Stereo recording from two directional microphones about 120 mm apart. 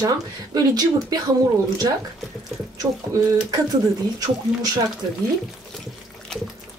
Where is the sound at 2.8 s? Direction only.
30° right (ahead or behind).